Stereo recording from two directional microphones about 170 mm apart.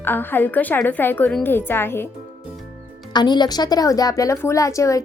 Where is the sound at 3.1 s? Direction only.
25° left (ahead or behind).